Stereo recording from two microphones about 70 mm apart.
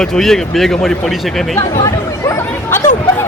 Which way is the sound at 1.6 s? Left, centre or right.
Left.